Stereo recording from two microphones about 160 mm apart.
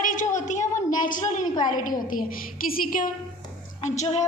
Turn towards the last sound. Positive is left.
turn(degrees=45)  # may be behind; listen again after turning